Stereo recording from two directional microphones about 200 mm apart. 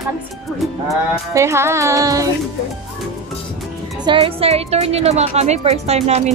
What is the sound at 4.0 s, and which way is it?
A woman's voice, 25° right (ahead or behind).